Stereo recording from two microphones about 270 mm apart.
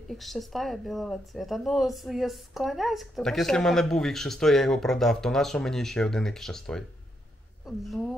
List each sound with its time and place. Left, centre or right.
0.1 s speech: centre